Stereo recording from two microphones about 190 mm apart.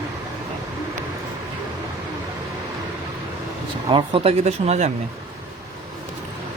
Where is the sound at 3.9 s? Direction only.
30° right (ahead or behind).